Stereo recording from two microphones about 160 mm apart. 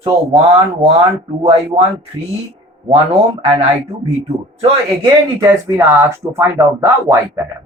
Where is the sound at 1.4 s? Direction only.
35° right (ahead or behind).